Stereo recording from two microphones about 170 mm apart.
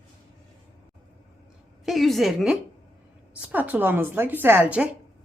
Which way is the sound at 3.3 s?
10° right (ahead or behind).